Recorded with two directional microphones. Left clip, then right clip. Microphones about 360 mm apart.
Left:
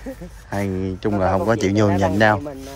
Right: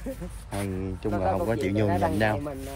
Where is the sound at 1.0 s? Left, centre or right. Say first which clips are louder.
Left 7 dB; left.